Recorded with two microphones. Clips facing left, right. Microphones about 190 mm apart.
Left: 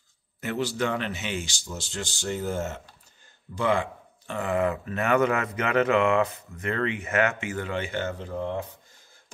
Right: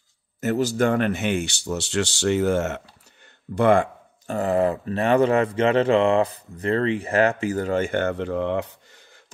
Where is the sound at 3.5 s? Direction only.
55° right (ahead or behind).